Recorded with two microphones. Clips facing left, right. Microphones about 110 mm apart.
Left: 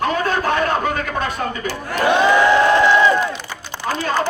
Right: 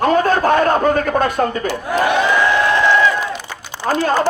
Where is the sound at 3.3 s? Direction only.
10° right (ahead or behind).